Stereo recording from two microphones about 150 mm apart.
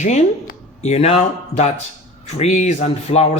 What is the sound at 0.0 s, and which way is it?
Speech, 50° left (ahead or behind).